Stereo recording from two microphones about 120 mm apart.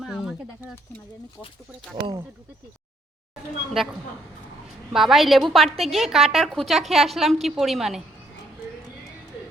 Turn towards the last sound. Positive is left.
turn(degrees=0)  # may be behind; listen again after turning